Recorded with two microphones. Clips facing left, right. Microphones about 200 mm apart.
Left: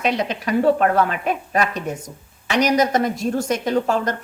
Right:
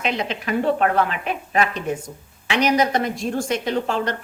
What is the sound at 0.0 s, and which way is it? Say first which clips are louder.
A woman's voice: left 3 dB; 40° left (ahead or behind).